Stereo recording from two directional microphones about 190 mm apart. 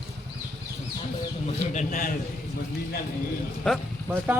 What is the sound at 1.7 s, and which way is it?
Speech, 45° left (ahead or behind).